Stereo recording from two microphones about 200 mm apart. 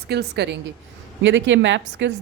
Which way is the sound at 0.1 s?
55° right (ahead or behind).